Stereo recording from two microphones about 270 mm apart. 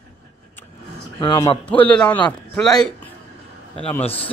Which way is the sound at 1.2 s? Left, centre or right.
Centre.